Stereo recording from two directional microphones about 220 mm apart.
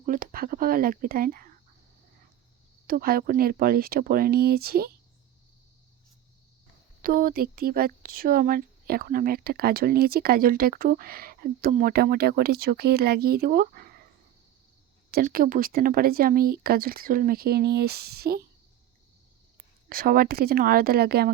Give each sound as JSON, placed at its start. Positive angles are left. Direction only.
{"t": 0.0, "sound": "speech", "side_deg": -40}
{"t": 2.8, "sound": "speech", "side_deg": -40}
{"t": 7.0, "sound": "speech", "side_deg": -40}
{"t": 15.1, "sound": "speech", "side_deg": -40}
{"t": 19.9, "sound": "speech", "side_deg": -40}